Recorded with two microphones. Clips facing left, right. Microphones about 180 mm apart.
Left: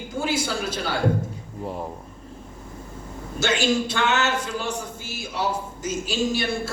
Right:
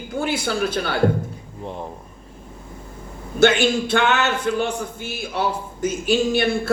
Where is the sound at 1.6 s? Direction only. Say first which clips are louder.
Left 1 dB; 5° left (ahead or behind).